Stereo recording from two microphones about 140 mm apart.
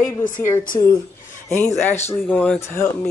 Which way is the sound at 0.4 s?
15° left (ahead or behind).